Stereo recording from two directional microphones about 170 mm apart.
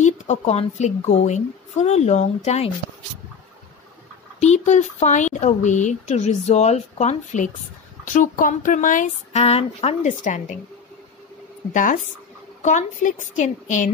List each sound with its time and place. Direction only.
0.0 s a woman's voice: 40° left (ahead or behind)
4.4 s speech: 45° left (ahead or behind)
11.7 s speech: 50° left (ahead or behind)